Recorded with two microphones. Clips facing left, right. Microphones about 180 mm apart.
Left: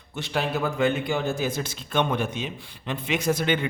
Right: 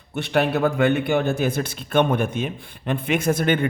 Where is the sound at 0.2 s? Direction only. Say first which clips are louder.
Right 6 dB; 60° right (ahead or behind).